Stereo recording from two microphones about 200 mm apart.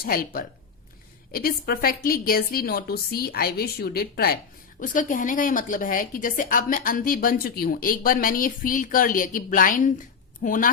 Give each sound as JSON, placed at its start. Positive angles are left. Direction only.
{"t": 0.0, "sound": "a woman's voice", "side_deg": 45}